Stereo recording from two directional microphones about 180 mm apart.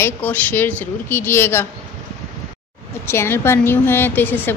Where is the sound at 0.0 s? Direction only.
10° left (ahead or behind).